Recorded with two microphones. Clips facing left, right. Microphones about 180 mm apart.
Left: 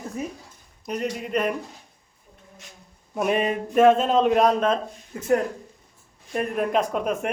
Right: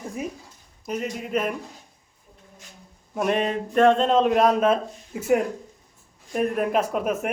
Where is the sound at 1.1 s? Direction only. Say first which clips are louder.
Left 1 dB; centre (ahead or behind).